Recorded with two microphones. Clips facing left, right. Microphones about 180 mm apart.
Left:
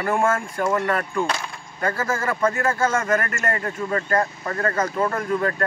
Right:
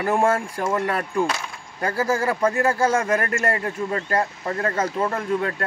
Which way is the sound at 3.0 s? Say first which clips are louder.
Right 1 dB; 30° right (ahead or behind).